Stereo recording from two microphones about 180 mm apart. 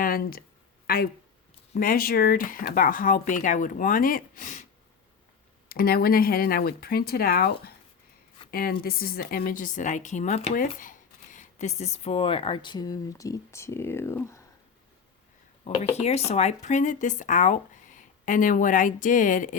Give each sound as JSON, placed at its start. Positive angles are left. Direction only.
{"t": 0.0, "sound": "speech", "side_deg": 55}
{"t": 5.6, "sound": "speech", "side_deg": 55}
{"t": 15.6, "sound": "speech", "side_deg": 35}